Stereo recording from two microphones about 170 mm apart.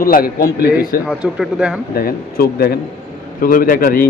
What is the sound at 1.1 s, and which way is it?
Speech, centre (ahead or behind).